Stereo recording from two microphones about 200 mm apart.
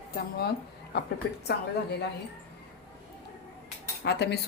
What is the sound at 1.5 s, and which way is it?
Speech, 60° left (ahead or behind).